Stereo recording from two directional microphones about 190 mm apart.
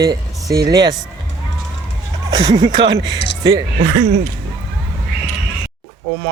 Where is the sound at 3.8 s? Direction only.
65° right (ahead or behind).